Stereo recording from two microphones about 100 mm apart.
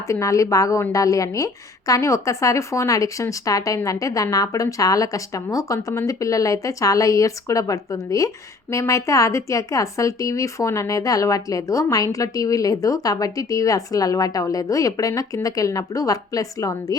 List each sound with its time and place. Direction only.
0.1 s speech: 30° left (ahead or behind)